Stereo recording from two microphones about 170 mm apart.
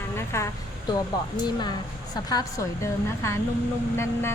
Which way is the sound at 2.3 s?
20° left (ahead or behind).